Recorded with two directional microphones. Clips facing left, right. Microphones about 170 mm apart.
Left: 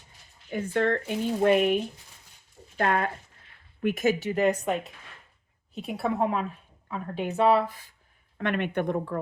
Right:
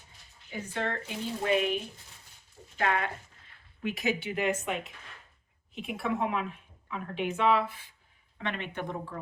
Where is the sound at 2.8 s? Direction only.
45° left (ahead or behind).